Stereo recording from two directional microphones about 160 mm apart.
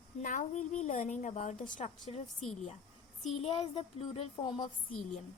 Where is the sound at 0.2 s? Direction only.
50° left (ahead or behind).